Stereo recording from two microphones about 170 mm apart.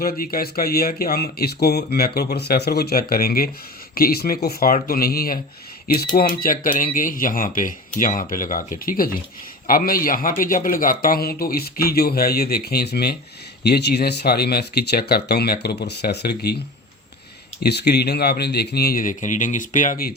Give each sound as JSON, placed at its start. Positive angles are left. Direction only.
{"t": 0.0, "sound": "speech", "side_deg": 60}
{"t": 17.6, "sound": "speech", "side_deg": 70}